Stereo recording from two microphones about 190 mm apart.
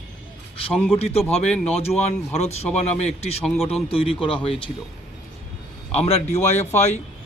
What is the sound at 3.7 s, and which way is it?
Speech, 30° left (ahead or behind).